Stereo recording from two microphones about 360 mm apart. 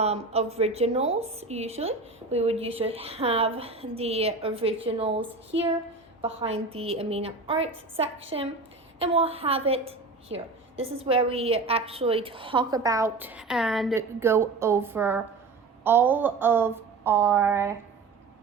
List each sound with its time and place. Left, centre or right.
0.0 s a woman's voice: centre
6.2 s a woman's voice: centre